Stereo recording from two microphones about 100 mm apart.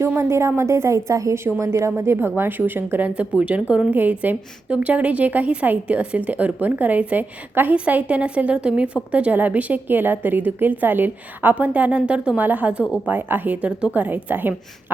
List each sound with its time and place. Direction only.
0.2 s a woman's voice: 25° right (ahead or behind)